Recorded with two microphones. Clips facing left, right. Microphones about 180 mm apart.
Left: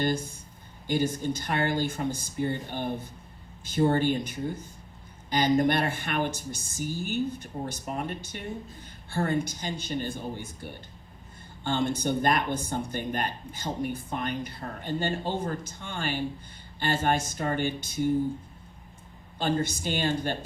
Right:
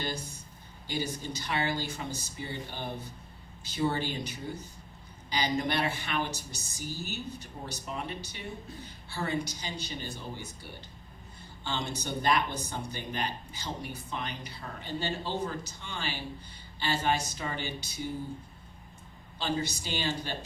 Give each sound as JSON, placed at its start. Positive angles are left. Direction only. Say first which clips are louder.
{"t": 0.0, "sound": "speech", "louder": "left 8 dB", "side_deg": 55}
{"t": 19.4, "sound": "speech", "louder": "left 5 dB", "side_deg": 50}